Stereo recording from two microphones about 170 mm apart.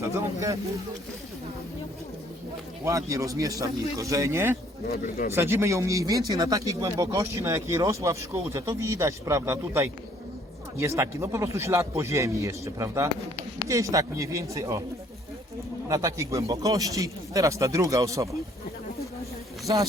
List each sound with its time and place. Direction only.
0.0 s speech: 20° right (ahead or behind)
2.8 s speech: 20° right (ahead or behind)
4.9 s speech: 60° left (ahead or behind)
5.3 s speech: 15° right (ahead or behind)
15.9 s speech: 20° right (ahead or behind)
19.6 s a man's voice: 20° right (ahead or behind)